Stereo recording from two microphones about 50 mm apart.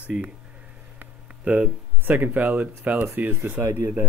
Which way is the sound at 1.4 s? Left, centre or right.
Right.